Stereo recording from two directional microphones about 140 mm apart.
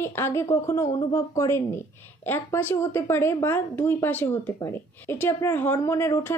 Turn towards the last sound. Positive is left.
turn(degrees=20)  # may be behind; listen again after turning